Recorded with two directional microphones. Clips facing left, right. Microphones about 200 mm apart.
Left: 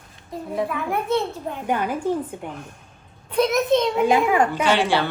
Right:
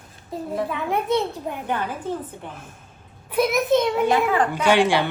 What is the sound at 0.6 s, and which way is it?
Speech, 20° right (ahead or behind).